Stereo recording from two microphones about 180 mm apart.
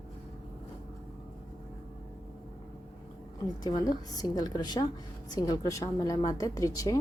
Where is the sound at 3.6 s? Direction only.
20° left (ahead or behind).